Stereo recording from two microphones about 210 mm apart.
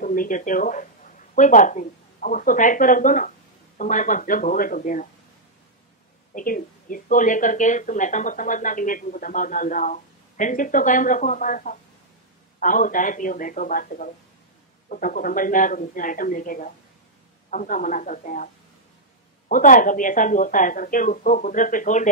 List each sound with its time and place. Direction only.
0.0 s speech: 40° left (ahead or behind)
6.3 s speech: 40° left (ahead or behind)
19.5 s speech: 40° left (ahead or behind)